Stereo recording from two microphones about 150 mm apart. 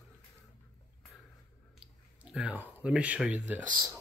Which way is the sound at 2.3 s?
10° right (ahead or behind).